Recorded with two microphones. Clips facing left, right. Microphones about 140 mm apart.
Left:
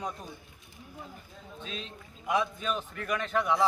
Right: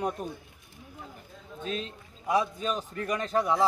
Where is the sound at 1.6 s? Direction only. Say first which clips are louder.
Right 8 dB; 45° right (ahead or behind).